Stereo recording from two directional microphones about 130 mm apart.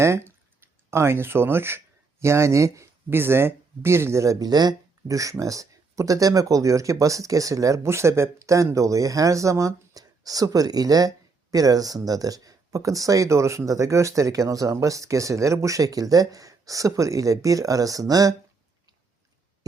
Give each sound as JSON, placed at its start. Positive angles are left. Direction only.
{"t": 0.0, "sound": "speech", "side_deg": -20}